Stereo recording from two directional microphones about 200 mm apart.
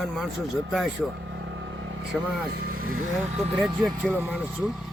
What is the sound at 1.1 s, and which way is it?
Vehicle, 65° right (ahead or behind).